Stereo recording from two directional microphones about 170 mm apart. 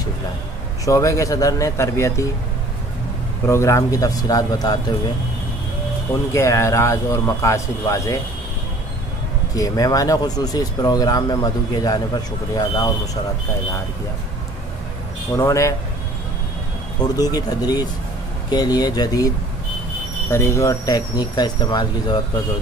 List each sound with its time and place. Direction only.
0.8 s a man's voice: 20° left (ahead or behind)
3.4 s speech: 15° left (ahead or behind)
6.3 s a man's voice: 15° left (ahead or behind)
9.6 s speech: 20° left (ahead or behind)
15.3 s speech: 20° left (ahead or behind)
17.0 s speech: 20° left (ahead or behind)